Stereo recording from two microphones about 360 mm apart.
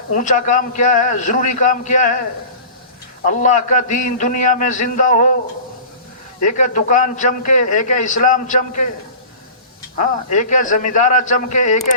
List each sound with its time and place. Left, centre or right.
0.1 s a man's voice: left
3.2 s a man's voice: left
6.4 s a man's voice: left
10.0 s a man's voice: left